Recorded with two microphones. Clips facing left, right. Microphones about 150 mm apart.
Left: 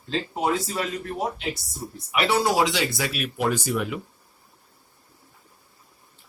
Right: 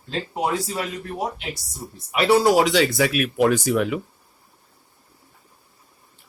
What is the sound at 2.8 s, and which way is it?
Speech, 60° right (ahead or behind).